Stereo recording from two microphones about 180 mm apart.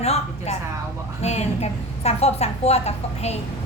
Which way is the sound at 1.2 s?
35° left (ahead or behind).